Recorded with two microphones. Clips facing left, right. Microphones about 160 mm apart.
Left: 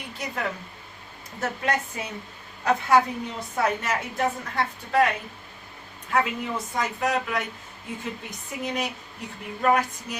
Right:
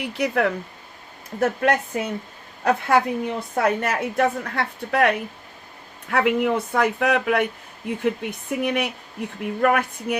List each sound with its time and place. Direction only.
0.0 s speech: 65° right (ahead or behind)
1.4 s a woman's voice: 55° right (ahead or behind)